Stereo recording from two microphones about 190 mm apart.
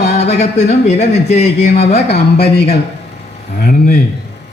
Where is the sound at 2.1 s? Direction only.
55° left (ahead or behind).